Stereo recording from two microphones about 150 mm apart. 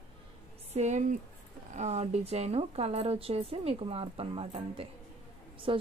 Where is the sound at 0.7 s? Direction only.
50° right (ahead or behind).